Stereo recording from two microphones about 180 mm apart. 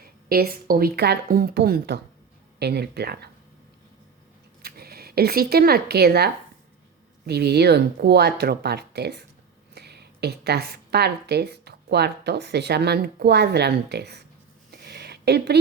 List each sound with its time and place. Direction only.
0.0 s speech: 55° right (ahead or behind)
4.6 s speech: 60° right (ahead or behind)
14.8 s a sound: 65° right (ahead or behind)